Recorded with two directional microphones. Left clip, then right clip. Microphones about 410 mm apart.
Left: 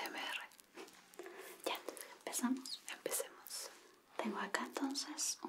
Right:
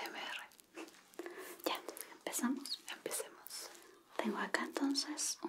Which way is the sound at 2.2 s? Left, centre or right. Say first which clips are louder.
Right 2 dB; right.